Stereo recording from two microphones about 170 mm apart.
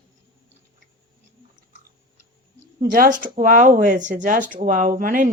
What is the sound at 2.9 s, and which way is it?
Speech, 50° right (ahead or behind).